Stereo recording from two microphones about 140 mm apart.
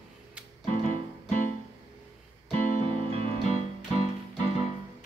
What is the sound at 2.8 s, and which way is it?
Music, 40° right (ahead or behind).